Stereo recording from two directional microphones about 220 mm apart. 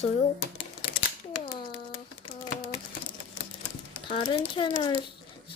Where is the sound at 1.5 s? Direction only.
25° left (ahead or behind).